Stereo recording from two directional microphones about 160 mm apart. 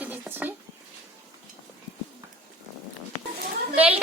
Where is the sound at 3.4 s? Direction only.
75° right (ahead or behind).